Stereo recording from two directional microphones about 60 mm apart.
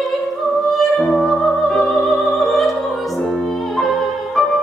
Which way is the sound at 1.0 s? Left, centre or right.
Centre.